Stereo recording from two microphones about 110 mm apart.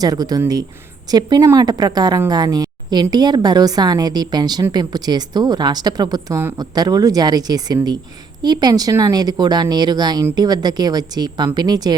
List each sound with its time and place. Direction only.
0.0 s a woman's voice: 35° right (ahead or behind)